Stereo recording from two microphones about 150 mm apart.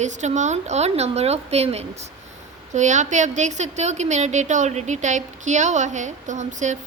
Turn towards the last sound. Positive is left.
turn(degrees=-55)  # may be behind; listen again after turning